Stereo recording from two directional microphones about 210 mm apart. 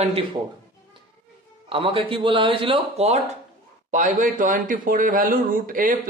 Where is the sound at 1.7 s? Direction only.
25° right (ahead or behind).